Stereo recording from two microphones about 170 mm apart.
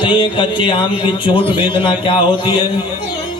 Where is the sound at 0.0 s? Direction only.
25° left (ahead or behind).